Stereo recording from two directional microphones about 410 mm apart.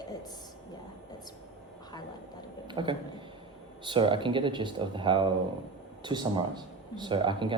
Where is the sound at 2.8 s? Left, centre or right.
Centre.